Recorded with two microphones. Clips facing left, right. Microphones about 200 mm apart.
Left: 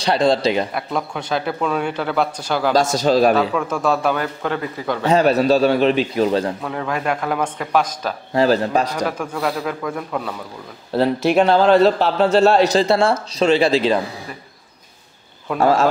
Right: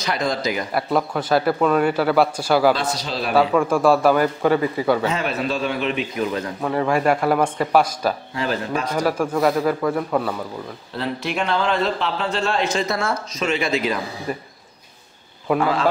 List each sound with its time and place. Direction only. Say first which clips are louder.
0.0 s speech: left 6 dB; 30° left (ahead or behind)
0.7 s a man's voice: right 3 dB; 5° right (ahead or behind)
2.7 s a man's voice: left 7 dB; 45° left (ahead or behind)
3.3 s a man's voice: right 3 dB; 10° right (ahead or behind)
5.0 s a man's voice: left 8 dB; 40° left (ahead or behind)
6.6 s a man's voice: right 4 dB; 5° right (ahead or behind)
8.4 s a man's voice: left 7 dB; 35° left (ahead or behind)
8.9 s a man's voice: right 3 dB; 5° right (ahead or behind)
11.0 s a man's voice: left 9 dB; 35° left (ahead or behind)
15.6 s a man's voice: left 7 dB; 45° left (ahead or behind)